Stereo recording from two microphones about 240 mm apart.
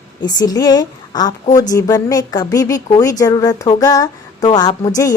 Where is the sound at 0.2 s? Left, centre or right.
Centre.